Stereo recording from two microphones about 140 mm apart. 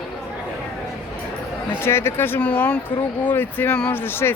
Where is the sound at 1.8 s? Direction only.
15° left (ahead or behind).